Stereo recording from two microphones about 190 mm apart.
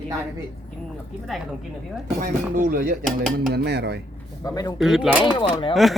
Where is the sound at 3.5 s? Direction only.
60° right (ahead or behind).